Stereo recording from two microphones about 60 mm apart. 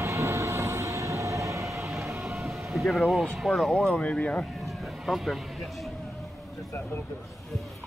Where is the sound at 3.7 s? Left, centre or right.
Centre.